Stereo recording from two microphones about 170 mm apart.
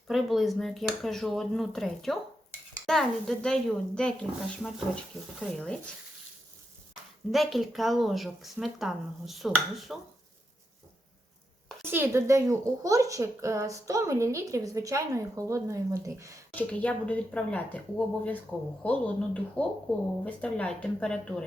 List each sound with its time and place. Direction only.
0.1 s a woman's voice: centre (ahead or behind)
7.3 s a woman's voice: centre (ahead or behind)
11.9 s speech: 15° right (ahead or behind)
16.6 s a woman's voice: 10° left (ahead or behind)